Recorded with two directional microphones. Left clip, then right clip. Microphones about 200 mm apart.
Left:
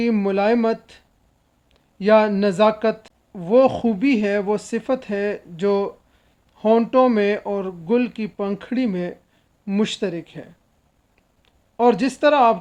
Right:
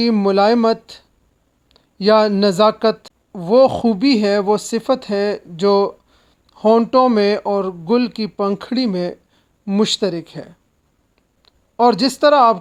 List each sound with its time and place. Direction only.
0.0 s speech: 25° right (ahead or behind)
11.8 s speech: 25° right (ahead or behind)